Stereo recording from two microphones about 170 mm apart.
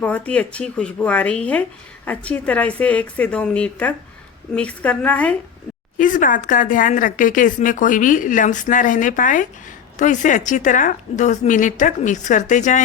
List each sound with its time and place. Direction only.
0.0 s a woman's voice: 5° left (ahead or behind)
6.0 s speech: 50° left (ahead or behind)